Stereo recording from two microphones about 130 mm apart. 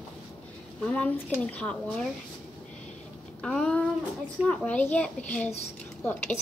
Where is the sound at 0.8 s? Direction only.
10° left (ahead or behind).